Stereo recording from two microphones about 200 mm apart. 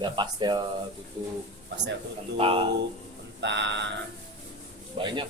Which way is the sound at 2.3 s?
25° right (ahead or behind).